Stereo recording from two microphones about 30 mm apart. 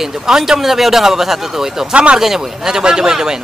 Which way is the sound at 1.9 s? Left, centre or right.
Right.